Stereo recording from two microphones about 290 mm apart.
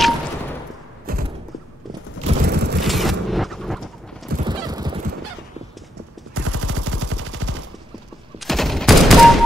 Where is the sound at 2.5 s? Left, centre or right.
Right.